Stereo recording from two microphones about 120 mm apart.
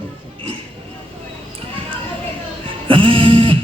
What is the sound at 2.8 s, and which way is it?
Music, 50° right (ahead or behind).